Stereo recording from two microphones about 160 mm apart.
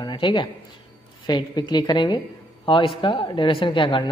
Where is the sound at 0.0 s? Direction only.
30° left (ahead or behind).